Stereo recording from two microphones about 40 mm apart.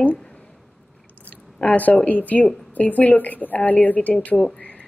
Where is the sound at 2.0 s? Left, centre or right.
Left.